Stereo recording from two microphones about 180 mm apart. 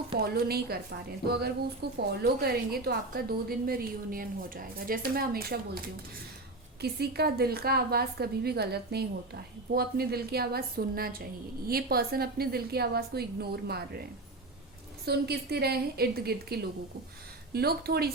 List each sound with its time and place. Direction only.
0.3 s a woman's voice: 60° right (ahead or behind)
6.8 s a woman's voice: 60° right (ahead or behind)
15.0 s a woman's voice: 65° right (ahead or behind)